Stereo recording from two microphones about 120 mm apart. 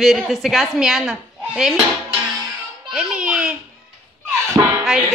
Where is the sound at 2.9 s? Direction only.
5° right (ahead or behind).